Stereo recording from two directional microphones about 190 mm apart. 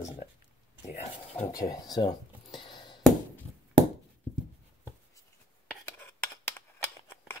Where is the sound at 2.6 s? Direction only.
25° left (ahead or behind).